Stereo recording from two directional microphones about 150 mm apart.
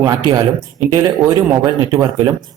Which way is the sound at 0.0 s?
25° right (ahead or behind).